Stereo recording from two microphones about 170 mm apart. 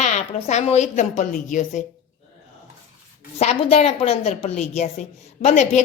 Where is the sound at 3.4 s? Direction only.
40° left (ahead or behind).